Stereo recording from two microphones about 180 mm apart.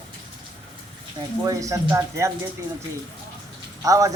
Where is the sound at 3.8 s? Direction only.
20° right (ahead or behind).